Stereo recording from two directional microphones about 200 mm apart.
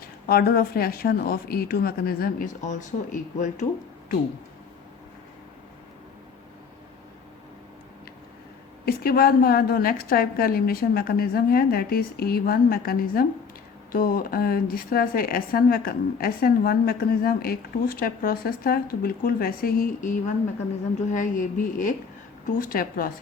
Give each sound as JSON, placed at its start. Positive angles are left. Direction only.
{"t": 0.0, "sound": "a woman's voice", "side_deg": 50}
{"t": 8.8, "sound": "a woman's voice", "side_deg": 50}